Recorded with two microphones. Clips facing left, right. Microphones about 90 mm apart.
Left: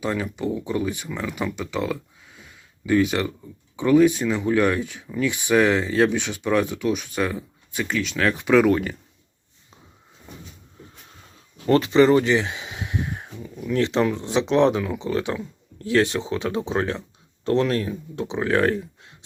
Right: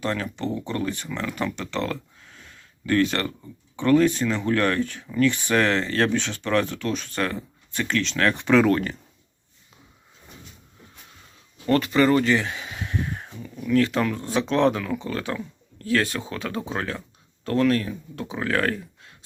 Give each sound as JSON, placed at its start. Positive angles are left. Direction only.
{"t": 0.0, "sound": "speech", "side_deg": 10}
{"t": 11.6, "sound": "speech", "side_deg": 25}